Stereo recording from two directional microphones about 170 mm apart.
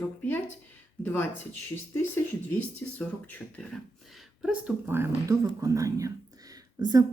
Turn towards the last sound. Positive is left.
turn(degrees=-20)  # may be behind; listen again after turning